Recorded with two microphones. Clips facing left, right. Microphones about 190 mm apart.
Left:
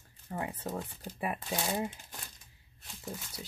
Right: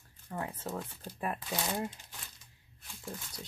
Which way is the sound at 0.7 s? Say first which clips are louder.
Left 1 dB; 15° left (ahead or behind).